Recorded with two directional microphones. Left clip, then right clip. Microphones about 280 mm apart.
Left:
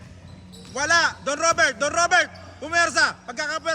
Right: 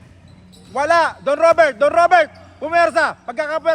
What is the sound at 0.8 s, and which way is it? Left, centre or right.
A man's voice, centre.